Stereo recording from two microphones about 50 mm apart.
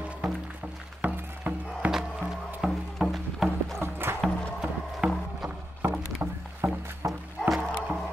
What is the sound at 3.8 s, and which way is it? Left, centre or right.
Music, right.